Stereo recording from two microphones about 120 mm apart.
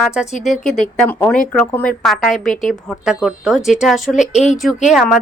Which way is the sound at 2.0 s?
Centre (ahead or behind).